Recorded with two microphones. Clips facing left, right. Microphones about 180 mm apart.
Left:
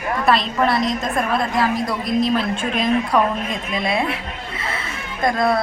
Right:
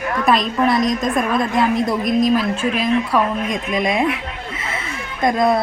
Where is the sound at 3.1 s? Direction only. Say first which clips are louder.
Even; 15° right (ahead or behind).